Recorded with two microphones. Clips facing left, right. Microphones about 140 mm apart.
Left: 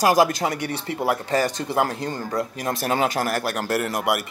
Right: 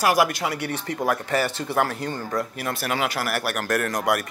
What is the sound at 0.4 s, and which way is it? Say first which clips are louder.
A man's voice: left 2 dB; 30° left (ahead or behind).